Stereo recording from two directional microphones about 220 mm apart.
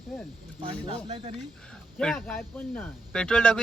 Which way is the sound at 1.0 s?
25° right (ahead or behind).